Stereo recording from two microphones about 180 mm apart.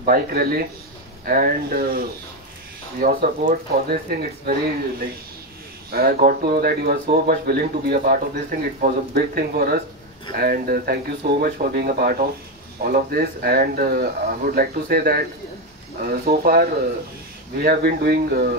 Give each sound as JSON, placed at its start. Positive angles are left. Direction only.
{"t": 0.0, "sound": "speech", "side_deg": -55}